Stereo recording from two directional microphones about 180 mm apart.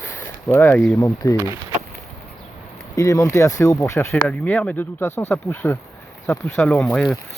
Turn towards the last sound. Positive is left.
turn(degrees=0)  # may be behind; listen again after turning